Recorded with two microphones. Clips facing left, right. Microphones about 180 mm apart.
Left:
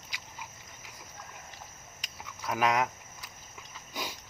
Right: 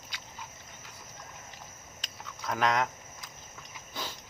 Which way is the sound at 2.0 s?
10° left (ahead or behind).